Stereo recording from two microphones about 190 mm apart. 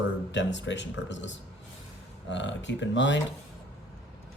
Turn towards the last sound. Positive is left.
turn(degrees=70)  # may be behind; listen again after turning